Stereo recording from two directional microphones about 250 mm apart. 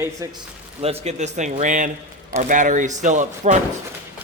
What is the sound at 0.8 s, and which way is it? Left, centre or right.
Speech, right.